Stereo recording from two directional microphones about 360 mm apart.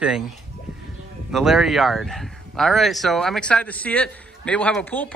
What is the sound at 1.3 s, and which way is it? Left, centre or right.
Speech, centre.